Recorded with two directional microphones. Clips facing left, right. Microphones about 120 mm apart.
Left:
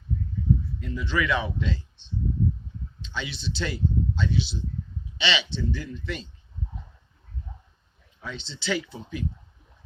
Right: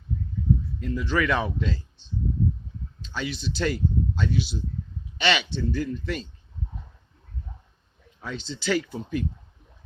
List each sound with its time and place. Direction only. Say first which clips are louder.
0.8 s speech: right 3 dB; 45° right (ahead or behind)
8.2 s speech: right 3 dB; 45° right (ahead or behind)